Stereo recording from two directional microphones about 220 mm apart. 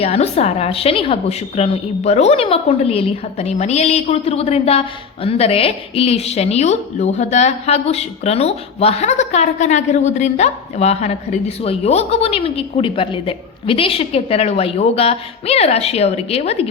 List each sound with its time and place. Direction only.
0.0 s a woman's voice: 25° left (ahead or behind)